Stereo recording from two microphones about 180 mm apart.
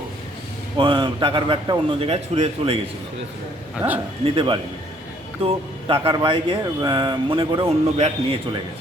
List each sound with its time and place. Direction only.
0.8 s speech: 25° right (ahead or behind)
4.4 s speech: 30° right (ahead or behind)